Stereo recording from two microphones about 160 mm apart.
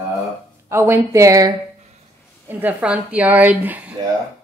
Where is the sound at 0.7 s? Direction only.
15° right (ahead or behind).